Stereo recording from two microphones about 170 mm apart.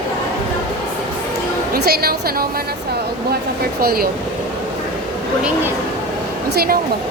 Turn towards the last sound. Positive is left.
turn(degrees=-65)  # may be behind; listen again after turning